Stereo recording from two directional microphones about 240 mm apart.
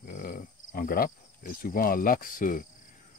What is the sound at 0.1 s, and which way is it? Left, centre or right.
Cricket, left.